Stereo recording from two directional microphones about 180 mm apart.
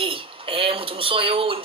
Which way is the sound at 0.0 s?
30° right (ahead or behind).